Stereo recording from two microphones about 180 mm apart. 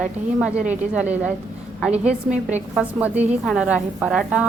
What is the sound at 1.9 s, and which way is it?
Speech, 40° right (ahead or behind).